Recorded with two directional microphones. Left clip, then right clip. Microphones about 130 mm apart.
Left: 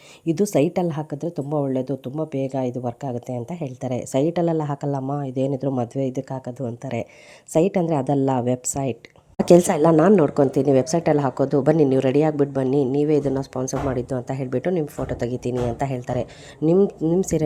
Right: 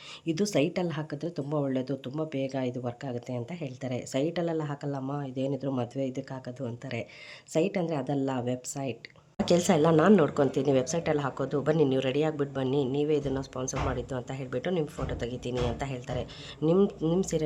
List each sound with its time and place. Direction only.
0.3 s speech: 40° left (ahead or behind); by 4.9 s 55° left (ahead or behind)
4.9 s speech: 35° left (ahead or behind)
5.2 s a woman's voice: 50° left (ahead or behind)
14.6 s speech: 30° left (ahead or behind)
15.0 s speech: 45° left (ahead or behind)
16.7 s speech: 25° left (ahead or behind)
17.2 s speech: 45° left (ahead or behind)